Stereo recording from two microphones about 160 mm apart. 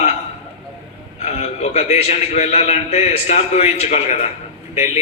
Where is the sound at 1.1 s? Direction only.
40° left (ahead or behind).